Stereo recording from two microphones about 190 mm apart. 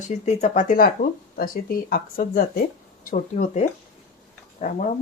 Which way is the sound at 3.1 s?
35° left (ahead or behind).